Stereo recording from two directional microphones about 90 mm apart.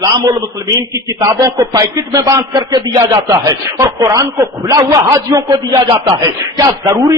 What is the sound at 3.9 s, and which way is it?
A man's voice, 40° right (ahead or behind).